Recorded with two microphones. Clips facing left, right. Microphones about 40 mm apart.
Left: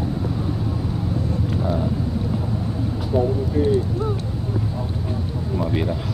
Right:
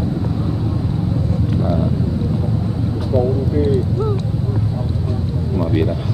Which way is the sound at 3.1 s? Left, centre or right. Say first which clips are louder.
Right 3 dB; centre.